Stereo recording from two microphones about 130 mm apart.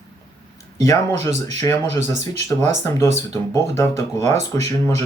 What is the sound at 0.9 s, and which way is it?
Speech, 20° left (ahead or behind).